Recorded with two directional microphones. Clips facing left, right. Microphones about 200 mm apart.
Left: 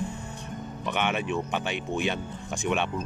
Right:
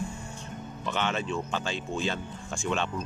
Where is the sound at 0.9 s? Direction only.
15° left (ahead or behind).